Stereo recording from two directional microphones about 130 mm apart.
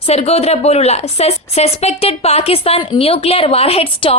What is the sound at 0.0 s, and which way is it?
A woman's voice, 50° left (ahead or behind).